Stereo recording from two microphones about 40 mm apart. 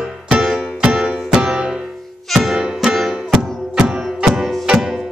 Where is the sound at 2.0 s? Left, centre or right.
Centre.